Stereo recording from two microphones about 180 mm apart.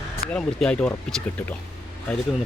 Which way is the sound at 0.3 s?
5° left (ahead or behind).